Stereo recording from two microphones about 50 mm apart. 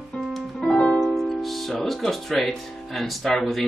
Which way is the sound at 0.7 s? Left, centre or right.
Centre.